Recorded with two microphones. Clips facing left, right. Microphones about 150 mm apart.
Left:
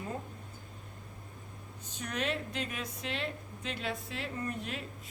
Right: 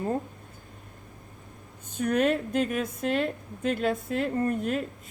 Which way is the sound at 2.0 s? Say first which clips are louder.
Right 11 dB; 55° right (ahead or behind).